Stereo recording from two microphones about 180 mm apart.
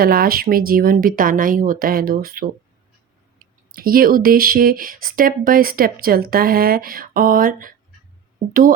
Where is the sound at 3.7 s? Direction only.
55° right (ahead or behind).